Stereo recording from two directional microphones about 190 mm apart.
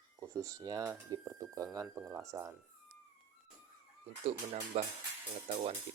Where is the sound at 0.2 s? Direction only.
15° right (ahead or behind).